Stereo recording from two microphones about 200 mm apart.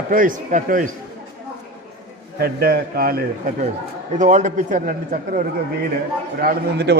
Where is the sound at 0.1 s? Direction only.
40° right (ahead or behind).